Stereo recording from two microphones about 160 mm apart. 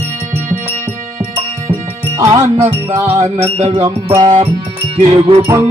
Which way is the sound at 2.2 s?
20° right (ahead or behind).